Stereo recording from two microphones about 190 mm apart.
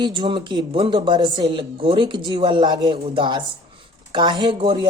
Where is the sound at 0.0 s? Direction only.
25° right (ahead or behind).